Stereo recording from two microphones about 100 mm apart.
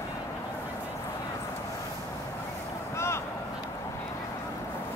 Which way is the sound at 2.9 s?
25° left (ahead or behind).